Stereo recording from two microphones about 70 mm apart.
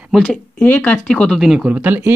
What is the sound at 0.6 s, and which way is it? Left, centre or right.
Speech, left.